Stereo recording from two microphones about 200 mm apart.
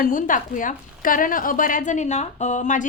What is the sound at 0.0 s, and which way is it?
A woman's voice, 40° left (ahead or behind).